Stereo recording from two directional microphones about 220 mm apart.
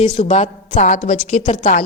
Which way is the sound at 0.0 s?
25° left (ahead or behind).